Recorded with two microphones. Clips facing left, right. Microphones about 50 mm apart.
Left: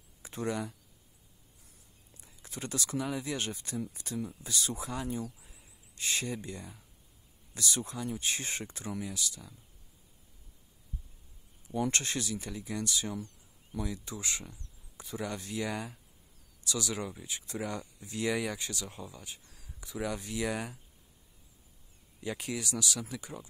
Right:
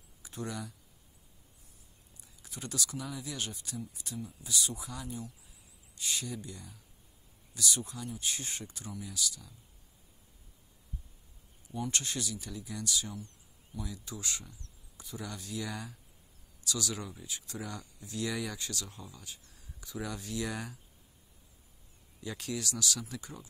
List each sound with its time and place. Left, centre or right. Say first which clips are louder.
0.2 s a sound: left 3 dB; left
2.4 s speech: left 2 dB; left
4.9 s speech: left 6 dB; left
11.9 s speech: left 3 dB; left
13.2 s a sound: left 4 dB; left
13.8 s speech: left 1 dB; left; by 20.8 s centre
22.2 s speech: left 2 dB; left